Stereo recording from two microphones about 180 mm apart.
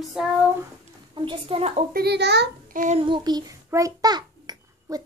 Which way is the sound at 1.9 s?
65° right (ahead or behind).